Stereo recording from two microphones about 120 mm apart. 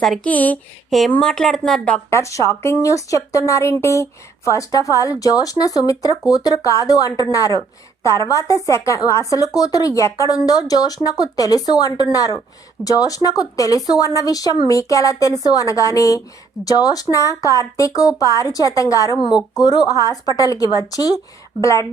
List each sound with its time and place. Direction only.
0.3 s speech: 15° left (ahead or behind)
0.9 s speech: centre (ahead or behind)
2.0 s a woman's voice: 25° left (ahead or behind)